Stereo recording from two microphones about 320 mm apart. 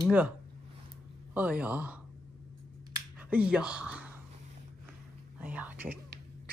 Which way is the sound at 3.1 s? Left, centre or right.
Centre.